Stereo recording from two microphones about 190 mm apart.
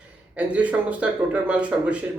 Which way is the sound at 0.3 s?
5° right (ahead or behind).